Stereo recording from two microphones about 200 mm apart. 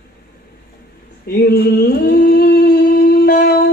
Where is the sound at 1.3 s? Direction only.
50° left (ahead or behind).